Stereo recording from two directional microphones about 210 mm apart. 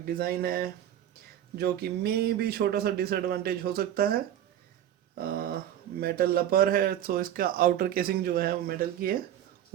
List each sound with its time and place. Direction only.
0.0 s speech: 45° right (ahead or behind)
5.1 s a sound: 45° right (ahead or behind)
6.0 s speech: 45° right (ahead or behind)